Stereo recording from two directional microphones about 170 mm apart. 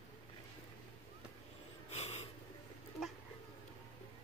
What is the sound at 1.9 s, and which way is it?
Snort, 40° left (ahead or behind).